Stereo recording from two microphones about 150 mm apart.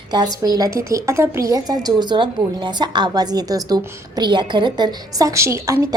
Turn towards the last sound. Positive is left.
turn(degrees=-20)  # may be behind; listen again after turning